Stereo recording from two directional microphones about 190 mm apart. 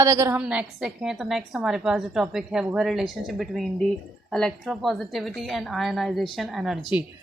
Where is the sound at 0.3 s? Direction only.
5° right (ahead or behind).